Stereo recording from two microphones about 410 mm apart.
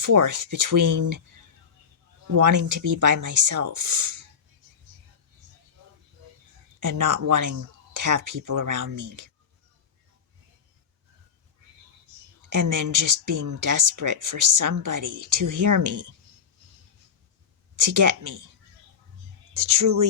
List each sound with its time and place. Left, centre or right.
0.0 s speech: right
2.3 s speech: right
6.7 s speech: right
12.5 s speech: right
17.7 s speech: right
19.5 s speech: right